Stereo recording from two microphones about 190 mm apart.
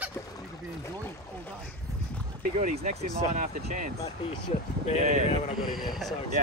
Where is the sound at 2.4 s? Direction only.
40° right (ahead or behind).